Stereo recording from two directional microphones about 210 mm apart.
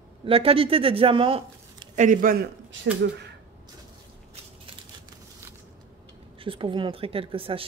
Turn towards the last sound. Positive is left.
turn(degrees=-25)  # may be behind; listen again after turning